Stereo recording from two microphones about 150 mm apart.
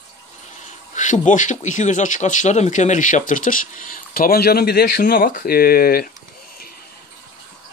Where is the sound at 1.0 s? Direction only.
55° left (ahead or behind); by 6.1 s 85° left.